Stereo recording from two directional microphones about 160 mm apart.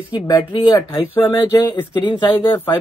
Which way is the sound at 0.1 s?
30° left (ahead or behind).